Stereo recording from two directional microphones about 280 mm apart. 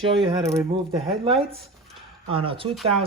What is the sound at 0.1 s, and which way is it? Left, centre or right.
Speech, centre.